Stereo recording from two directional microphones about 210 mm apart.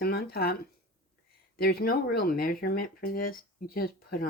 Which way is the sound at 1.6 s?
45° left (ahead or behind).